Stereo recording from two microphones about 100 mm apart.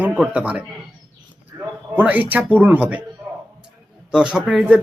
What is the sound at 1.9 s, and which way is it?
A man's voice, 15° right (ahead or behind).